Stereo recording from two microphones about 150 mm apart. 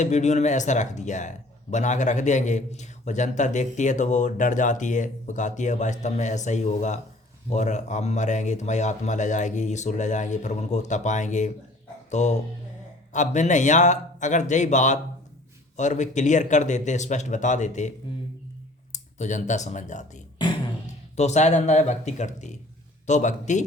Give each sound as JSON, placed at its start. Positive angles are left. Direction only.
{"t": 0.0, "sound": "a man's voice", "side_deg": 50}
{"t": 19.2, "sound": "a man's voice", "side_deg": 55}